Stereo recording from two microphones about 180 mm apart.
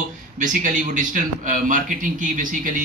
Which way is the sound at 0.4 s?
45° right (ahead or behind).